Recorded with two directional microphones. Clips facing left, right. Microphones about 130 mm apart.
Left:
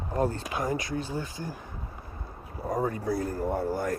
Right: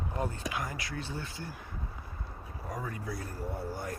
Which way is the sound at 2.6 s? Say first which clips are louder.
Left 11 dB; 50° left (ahead or behind).